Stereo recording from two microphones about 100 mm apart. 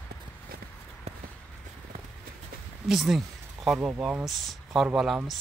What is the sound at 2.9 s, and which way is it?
Speech, 5° right (ahead or behind).